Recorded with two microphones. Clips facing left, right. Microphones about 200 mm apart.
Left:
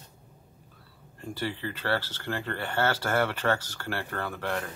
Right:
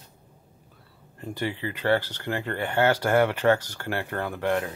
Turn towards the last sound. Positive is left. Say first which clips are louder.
# right 6 dB
turn(degrees=-15)  # may be behind; listen again after turning